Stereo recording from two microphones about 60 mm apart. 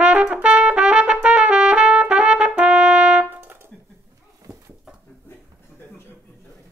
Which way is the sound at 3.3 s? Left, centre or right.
Right.